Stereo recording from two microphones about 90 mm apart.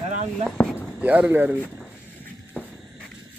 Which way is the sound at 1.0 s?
15° right (ahead or behind).